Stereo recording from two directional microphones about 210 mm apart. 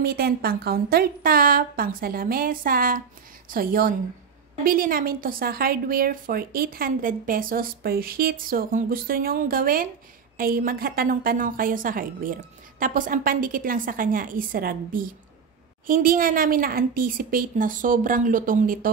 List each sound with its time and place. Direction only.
0.0 s a woman's voice: 45° right (ahead or behind)